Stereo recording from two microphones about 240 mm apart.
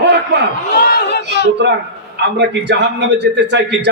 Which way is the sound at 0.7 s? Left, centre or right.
Left.